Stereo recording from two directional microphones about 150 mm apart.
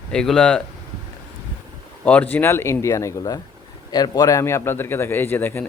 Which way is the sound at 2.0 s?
10° left (ahead or behind).